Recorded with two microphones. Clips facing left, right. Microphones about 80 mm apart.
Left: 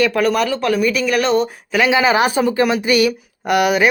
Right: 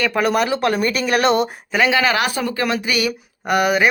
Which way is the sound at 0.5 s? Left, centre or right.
Right.